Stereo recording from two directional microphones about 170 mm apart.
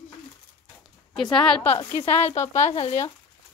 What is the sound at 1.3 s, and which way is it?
Speech, 5° left (ahead or behind).